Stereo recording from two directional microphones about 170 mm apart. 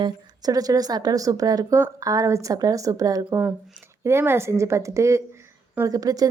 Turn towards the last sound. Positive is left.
turn(degrees=-20)  # may be behind; listen again after turning